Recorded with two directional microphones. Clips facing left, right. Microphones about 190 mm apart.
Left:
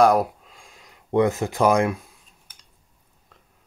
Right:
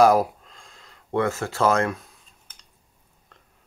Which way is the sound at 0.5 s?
10° left (ahead or behind).